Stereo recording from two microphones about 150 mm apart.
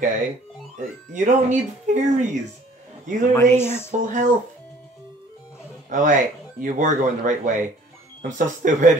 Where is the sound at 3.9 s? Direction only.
60° right (ahead or behind).